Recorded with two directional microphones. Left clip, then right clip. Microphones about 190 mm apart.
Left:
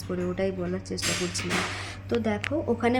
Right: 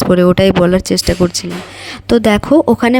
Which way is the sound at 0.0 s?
60° right (ahead or behind).